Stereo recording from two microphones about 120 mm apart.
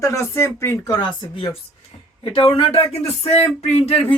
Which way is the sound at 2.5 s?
55° left (ahead or behind).